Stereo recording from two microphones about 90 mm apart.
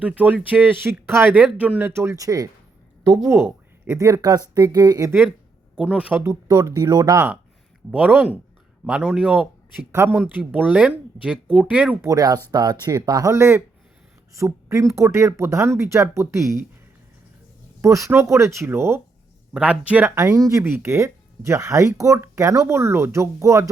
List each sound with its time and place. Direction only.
0.0 s speech: 15° right (ahead or behind)
1.9 s speech: 30° right (ahead or behind)
3.2 s speech: 25° right (ahead or behind); by 5.1 s 40° right (ahead or behind)
5.7 s speech: 10° right (ahead or behind)
6.5 s speech: 40° right (ahead or behind)
7.9 s speech: 15° right (ahead or behind)
9.9 s speech: 30° right (ahead or behind)
10.2 s speech: 15° right (ahead or behind)
12.0 s speech: 40° right (ahead or behind)
13.3 s speech: 30° right (ahead or behind)
17.7 s speech: 35° right (ahead or behind)
19.5 s speech: 10° right (ahead or behind)
20.1 s speech: 35° right (ahead or behind)